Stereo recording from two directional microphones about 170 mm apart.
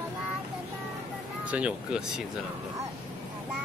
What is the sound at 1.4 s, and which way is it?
Speech, 5° right (ahead or behind).